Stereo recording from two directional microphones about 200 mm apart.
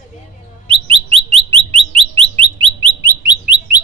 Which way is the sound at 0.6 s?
25° right (ahead or behind).